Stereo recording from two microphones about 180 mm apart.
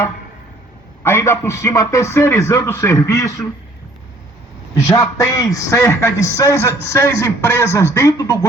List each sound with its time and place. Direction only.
1.0 s a man's voice: 15° left (ahead or behind)
4.7 s a man's voice: 20° left (ahead or behind)